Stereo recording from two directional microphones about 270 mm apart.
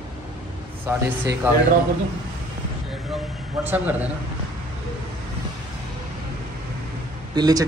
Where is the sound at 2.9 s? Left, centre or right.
Centre.